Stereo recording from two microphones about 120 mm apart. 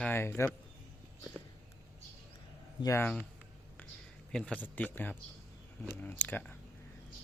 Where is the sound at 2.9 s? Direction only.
15° left (ahead or behind).